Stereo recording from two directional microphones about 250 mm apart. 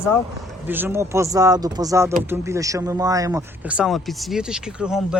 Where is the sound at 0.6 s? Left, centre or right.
Centre.